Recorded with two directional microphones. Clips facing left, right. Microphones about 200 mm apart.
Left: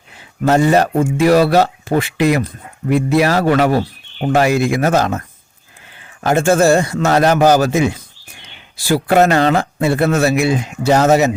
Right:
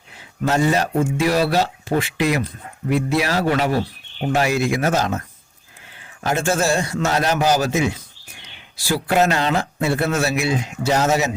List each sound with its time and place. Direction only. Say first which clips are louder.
0.4 s speech: left 6 dB; 55° left (ahead or behind)
6.2 s speech: left 8 dB; 55° left (ahead or behind)
9.0 s speech: left 6 dB; 55° left (ahead or behind)